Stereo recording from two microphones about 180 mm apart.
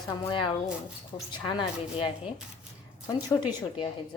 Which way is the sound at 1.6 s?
30° left (ahead or behind).